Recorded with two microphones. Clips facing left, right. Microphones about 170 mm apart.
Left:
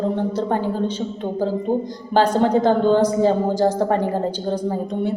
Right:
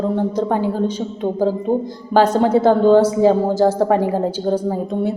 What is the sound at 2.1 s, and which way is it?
A woman's voice, 10° right (ahead or behind).